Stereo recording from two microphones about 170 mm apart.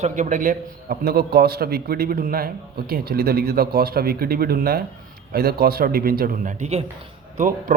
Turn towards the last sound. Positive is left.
turn(degrees=-50)  # may be behind; listen again after turning